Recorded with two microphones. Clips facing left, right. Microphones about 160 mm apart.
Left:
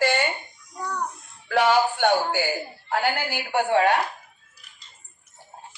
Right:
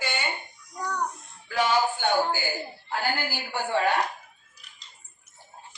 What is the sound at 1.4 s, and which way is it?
A woman's voice, 70° left (ahead or behind).